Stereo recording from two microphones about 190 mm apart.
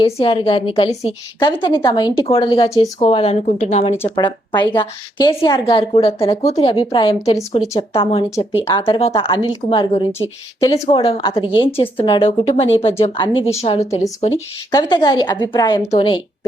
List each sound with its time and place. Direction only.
0.0 s a woman's voice: 30° left (ahead or behind)
3.0 s speech: 30° left (ahead or behind)
4.1 s a woman's voice: 25° left (ahead or behind)
14.3 s a woman's voice: 20° left (ahead or behind)